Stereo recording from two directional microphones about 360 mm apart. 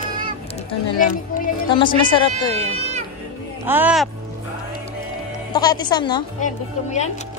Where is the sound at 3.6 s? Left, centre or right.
Centre.